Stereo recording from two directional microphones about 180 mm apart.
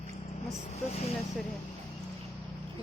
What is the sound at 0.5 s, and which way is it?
Speech, 35° left (ahead or behind).